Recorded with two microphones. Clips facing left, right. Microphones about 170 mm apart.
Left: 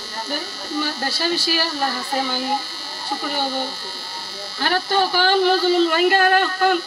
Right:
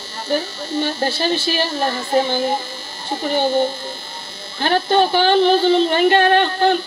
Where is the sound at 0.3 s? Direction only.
25° right (ahead or behind).